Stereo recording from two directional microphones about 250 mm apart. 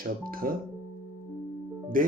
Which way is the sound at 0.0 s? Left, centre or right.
Right.